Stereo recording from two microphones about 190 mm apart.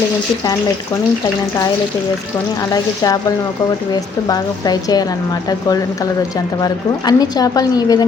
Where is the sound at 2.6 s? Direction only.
20° left (ahead or behind).